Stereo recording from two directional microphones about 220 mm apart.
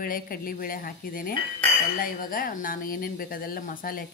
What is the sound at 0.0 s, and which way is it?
Speech, 40° left (ahead or behind).